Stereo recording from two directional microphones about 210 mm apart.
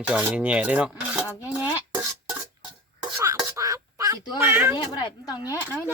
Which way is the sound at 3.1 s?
15° right (ahead or behind).